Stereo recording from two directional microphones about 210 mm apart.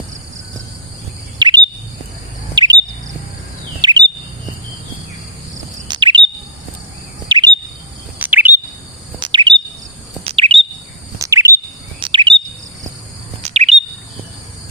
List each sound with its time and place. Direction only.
1.4 s bird vocalization: 20° right (ahead or behind)
2.6 s chirp: 20° right (ahead or behind)
3.8 s chirp: 20° right (ahead or behind)
5.9 s chirp: 20° right (ahead or behind)
7.3 s bird vocalization: 20° right (ahead or behind)
8.2 s bird vocalization: 10° right (ahead or behind)
9.2 s bird vocalization: 20° right (ahead or behind)
10.2 s chirp: 25° right (ahead or behind)
11.2 s chirp: 15° right (ahead or behind)
13.4 s chirp: 30° right (ahead or behind)